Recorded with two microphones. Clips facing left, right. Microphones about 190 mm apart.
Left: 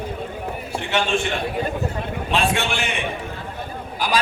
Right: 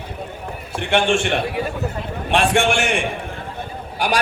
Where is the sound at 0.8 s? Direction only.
55° right (ahead or behind).